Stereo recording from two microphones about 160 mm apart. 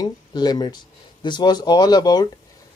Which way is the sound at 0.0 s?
25° left (ahead or behind).